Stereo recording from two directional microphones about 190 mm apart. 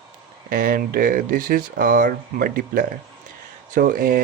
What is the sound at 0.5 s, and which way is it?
Speech, 50° right (ahead or behind).